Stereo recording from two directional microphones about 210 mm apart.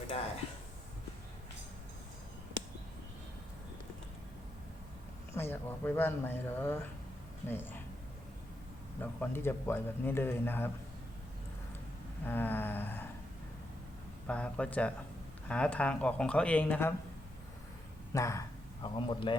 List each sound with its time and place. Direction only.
5.3 s speech: 10° left (ahead or behind)
9.0 s speech: 10° left (ahead or behind)
12.2 s a sound: 10° left (ahead or behind)
14.3 s speech: 5° left (ahead or behind)
18.1 s speech: 15° left (ahead or behind)